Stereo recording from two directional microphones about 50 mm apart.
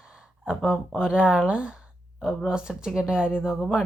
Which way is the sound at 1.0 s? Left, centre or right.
Centre.